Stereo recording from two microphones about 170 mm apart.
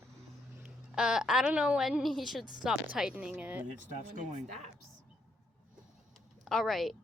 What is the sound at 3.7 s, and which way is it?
Speech, 45° right (ahead or behind).